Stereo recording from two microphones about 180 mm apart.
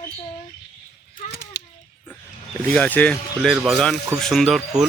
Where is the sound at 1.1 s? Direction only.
65° left (ahead or behind).